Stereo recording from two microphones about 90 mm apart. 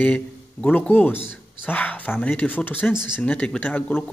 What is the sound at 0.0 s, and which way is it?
Speech, 15° left (ahead or behind).